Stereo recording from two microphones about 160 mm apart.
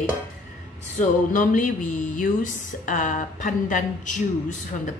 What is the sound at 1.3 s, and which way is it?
A woman's voice, 55° left (ahead or behind).